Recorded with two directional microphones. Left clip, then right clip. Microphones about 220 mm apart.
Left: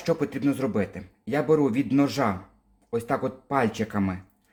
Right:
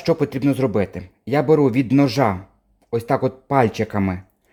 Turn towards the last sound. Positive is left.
turn(degrees=-35)  # may be behind; listen again after turning